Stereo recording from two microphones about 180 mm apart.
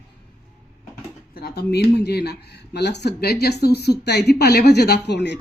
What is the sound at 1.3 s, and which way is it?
Speech, 60° left (ahead or behind).